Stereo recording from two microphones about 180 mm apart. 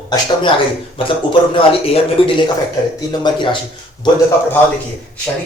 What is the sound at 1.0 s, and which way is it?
Speech, 30° left (ahead or behind).